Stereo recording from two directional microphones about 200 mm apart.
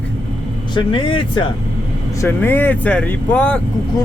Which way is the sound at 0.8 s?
25° left (ahead or behind).